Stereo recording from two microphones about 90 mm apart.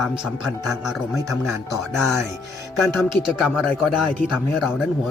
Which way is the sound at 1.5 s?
30° right (ahead or behind).